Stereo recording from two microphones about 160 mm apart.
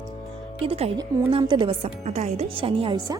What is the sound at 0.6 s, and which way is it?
A woman's voice, 40° right (ahead or behind).